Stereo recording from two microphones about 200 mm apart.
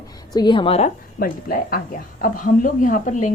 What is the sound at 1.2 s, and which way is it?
Speech, 45° left (ahead or behind).